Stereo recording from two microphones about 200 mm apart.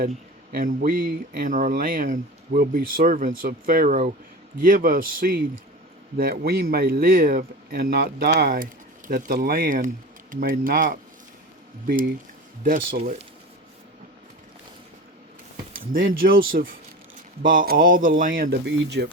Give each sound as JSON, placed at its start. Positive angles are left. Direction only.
{"t": 0.5, "sound": "speech", "side_deg": -45}
{"t": 15.7, "sound": "speech", "side_deg": -45}